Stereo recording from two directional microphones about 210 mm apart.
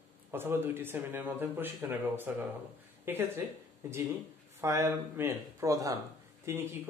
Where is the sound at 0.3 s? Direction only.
10° right (ahead or behind).